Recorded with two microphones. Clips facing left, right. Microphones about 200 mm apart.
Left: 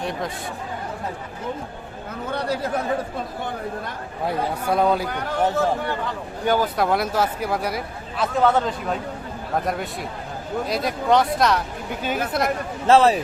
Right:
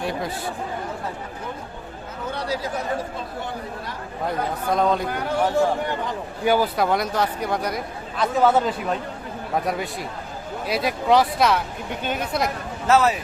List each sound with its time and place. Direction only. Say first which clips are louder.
0.0 s speech: right 1 dB; 5° right (ahead or behind)
2.3 s chatter: left 3 dB; 55° left (ahead or behind)
4.3 s speech: left 1 dB; 10° left (ahead or behind)
5.5 s a man's voice: right 1 dB; 15° right (ahead or behind); by 12.5 s 5° left (ahead or behind)
12.9 s speech: left 3 dB; 30° left (ahead or behind)